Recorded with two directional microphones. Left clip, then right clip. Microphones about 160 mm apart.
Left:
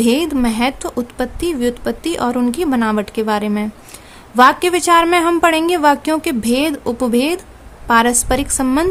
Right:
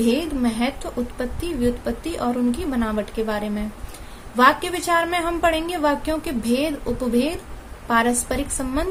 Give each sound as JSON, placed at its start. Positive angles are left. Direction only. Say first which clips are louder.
{"t": 0.0, "sound": "speech", "louder": "left 6 dB", "side_deg": 50}